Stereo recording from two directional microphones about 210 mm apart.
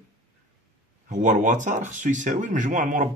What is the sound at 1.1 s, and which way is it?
Speech, 35° right (ahead or behind).